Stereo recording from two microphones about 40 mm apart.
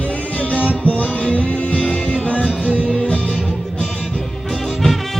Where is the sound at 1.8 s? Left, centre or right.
Left.